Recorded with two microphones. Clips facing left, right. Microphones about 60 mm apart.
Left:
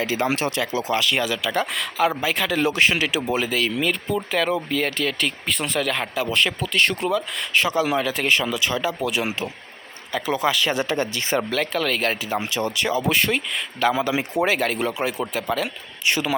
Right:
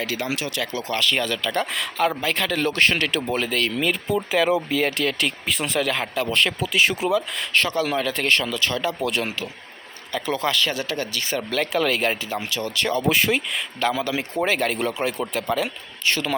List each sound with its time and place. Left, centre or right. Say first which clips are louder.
0.0 s speech: left 4 dB; left
0.3 s speech: left 4 dB; left
0.6 s speech: left 2 dB; centre
10.7 s speech: left 4 dB; left
11.5 s speech: right 1 dB; centre
12.2 s speech: left 3 dB; centre
12.7 s speech: right 2 dB; centre
13.9 s speech: left 2 dB; centre
16.0 s speech: left 1 dB; centre